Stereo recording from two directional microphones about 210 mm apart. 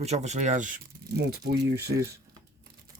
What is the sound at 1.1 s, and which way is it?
Speech, 50° right (ahead or behind).